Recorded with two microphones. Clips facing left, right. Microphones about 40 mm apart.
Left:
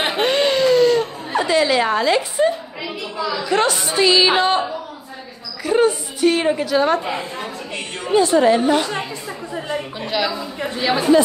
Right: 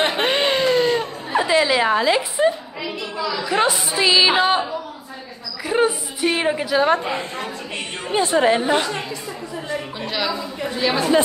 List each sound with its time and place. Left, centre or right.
0.2 s a sound: right
1.4 s speech: centre
7.1 s a woman's voice: right
8.0 s a woman's voice: right
9.9 s a woman's voice: centre